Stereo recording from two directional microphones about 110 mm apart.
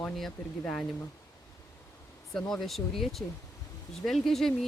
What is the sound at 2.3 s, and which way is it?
Speech, centre (ahead or behind).